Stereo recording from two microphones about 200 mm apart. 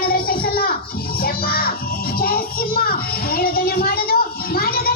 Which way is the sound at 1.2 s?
50° left (ahead or behind).